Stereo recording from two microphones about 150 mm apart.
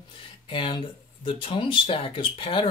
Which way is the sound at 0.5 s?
35° left (ahead or behind).